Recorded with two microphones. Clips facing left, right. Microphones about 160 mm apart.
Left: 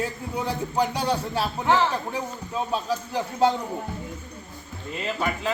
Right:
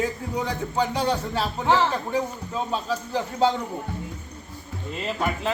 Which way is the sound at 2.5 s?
10° left (ahead or behind).